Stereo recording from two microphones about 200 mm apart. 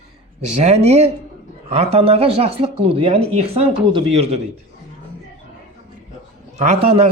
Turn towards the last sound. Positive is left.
turn(degrees=-30)  # may be behind; listen again after turning